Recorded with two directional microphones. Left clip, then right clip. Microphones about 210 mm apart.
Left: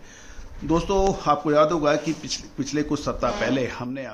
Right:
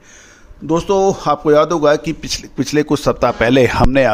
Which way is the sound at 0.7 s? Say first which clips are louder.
Right 8 dB; 40° right (ahead or behind).